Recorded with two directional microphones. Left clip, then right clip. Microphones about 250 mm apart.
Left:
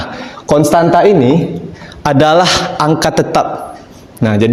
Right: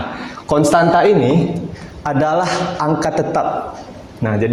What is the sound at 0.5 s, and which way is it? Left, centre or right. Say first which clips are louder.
Speech: left 3 dB; left.